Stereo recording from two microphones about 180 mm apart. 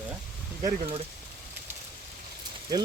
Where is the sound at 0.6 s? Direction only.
25° right (ahead or behind).